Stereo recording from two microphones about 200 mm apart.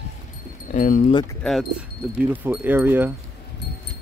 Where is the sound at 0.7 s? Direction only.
40° left (ahead or behind).